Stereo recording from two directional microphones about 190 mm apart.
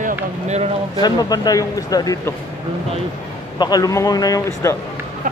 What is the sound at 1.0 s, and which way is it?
Speech, 20° left (ahead or behind).